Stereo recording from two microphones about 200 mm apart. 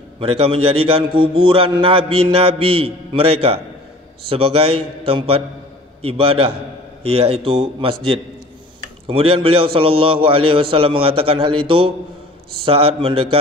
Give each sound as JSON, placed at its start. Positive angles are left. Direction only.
{"t": 0.2, "sound": "a man's voice", "side_deg": -30}
{"t": 9.0, "sound": "a man's voice", "side_deg": -25}